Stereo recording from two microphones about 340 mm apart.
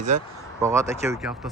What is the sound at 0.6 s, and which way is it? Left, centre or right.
Speech, centre.